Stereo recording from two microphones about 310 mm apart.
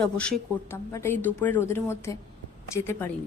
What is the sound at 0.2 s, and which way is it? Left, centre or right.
A woman's voice, centre.